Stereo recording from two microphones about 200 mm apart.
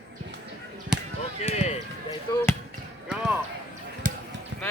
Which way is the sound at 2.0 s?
20° left (ahead or behind).